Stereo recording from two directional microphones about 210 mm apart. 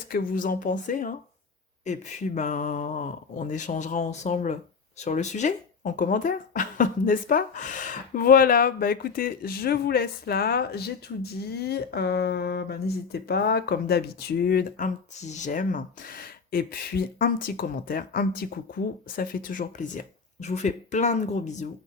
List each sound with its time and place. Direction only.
0.1 s speech: 40° left (ahead or behind)